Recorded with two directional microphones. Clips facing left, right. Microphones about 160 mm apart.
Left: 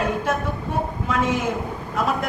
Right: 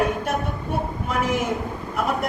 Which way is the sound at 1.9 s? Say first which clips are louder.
Left 1 dB; 90° left.